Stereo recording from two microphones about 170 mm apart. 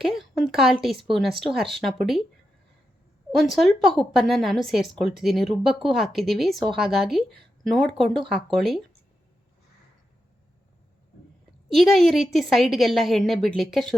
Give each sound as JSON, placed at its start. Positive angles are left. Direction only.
{"t": 0.2, "sound": "a sound", "side_deg": 0}
{"t": 1.1, "sound": "a woman's voice", "side_deg": 0}
{"t": 3.3, "sound": "a woman's voice", "side_deg": 0}
{"t": 8.0, "sound": "speech", "side_deg": -30}
{"t": 8.4, "sound": "a woman's voice", "side_deg": 0}
{"t": 11.7, "sound": "a woman's voice", "side_deg": 0}